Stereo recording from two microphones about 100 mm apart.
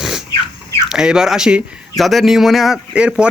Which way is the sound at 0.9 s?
5° right (ahead or behind).